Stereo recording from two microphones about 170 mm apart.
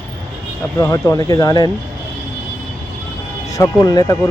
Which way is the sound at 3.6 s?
20° left (ahead or behind).